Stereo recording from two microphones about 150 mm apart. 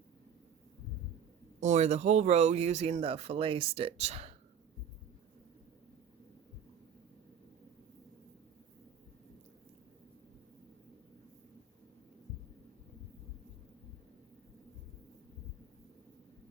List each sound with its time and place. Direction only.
1.6 s speech: 50° right (ahead or behind)